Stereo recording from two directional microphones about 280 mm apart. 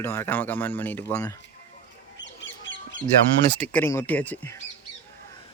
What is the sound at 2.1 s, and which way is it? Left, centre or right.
Duck, left.